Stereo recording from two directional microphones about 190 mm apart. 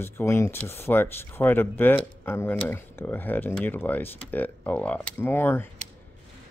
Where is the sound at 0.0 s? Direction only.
15° left (ahead or behind).